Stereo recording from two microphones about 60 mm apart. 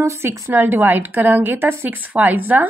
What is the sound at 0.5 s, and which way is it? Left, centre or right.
A woman's voice, right.